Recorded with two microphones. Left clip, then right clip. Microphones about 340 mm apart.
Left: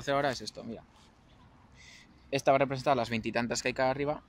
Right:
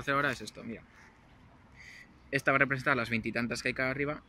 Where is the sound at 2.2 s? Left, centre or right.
Centre.